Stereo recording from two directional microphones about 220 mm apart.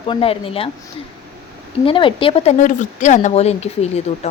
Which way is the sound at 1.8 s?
25° left (ahead or behind).